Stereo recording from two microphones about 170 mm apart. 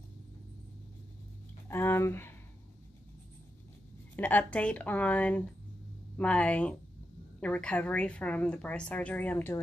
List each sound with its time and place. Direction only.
1.7 s speech: 15° left (ahead or behind)
4.2 s a woman's voice: 10° left (ahead or behind)